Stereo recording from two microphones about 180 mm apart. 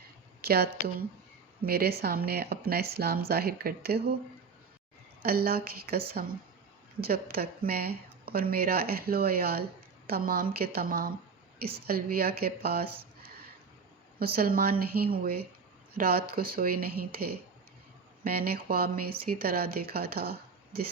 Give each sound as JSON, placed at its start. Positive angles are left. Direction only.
{"t": 0.4, "sound": "speech", "side_deg": -60}
{"t": 5.2, "sound": "speech", "side_deg": -55}
{"t": 7.0, "sound": "speech", "side_deg": -55}